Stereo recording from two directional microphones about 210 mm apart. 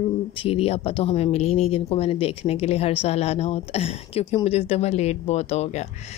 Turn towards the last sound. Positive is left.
turn(degrees=30)  # may be behind; listen again after turning